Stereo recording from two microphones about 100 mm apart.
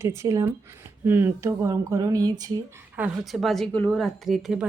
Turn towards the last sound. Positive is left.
turn(degrees=-5)  # may be behind; listen again after turning